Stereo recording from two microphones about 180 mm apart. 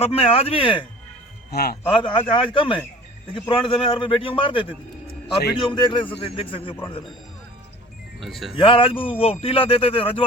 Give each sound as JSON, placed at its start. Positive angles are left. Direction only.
{"t": 0.0, "sound": "a man's voice", "side_deg": 30}
{"t": 1.5, "sound": "a man's voice", "side_deg": 60}
{"t": 1.9, "sound": "a man's voice", "side_deg": 30}
{"t": 8.2, "sound": "speech", "side_deg": 0}
{"t": 8.5, "sound": "a man's voice", "side_deg": 30}